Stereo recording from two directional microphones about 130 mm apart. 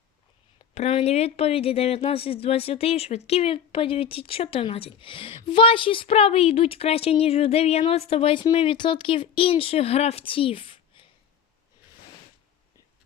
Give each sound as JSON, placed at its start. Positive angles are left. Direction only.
{"t": 0.7, "sound": "speech", "side_deg": 55}